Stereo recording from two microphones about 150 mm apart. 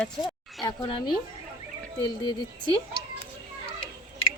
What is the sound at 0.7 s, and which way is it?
Speech, 30° left (ahead or behind).